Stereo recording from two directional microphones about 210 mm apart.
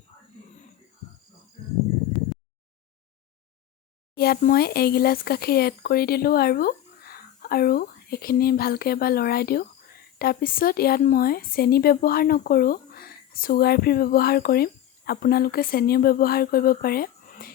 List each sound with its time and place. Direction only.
4.1 s a woman's voice: 50° left (ahead or behind)